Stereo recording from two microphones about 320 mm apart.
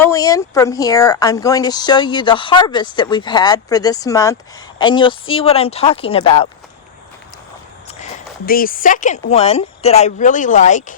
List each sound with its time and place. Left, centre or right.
0.0 s speech: centre
8.4 s a woman's voice: left